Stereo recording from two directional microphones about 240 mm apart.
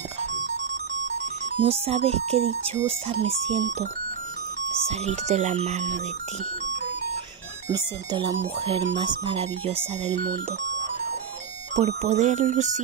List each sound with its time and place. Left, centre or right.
1.6 s speech: right
4.8 s speech: right
7.6 s speech: centre
11.7 s speech: right